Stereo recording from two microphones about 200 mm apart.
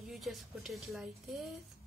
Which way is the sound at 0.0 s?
Centre (ahead or behind).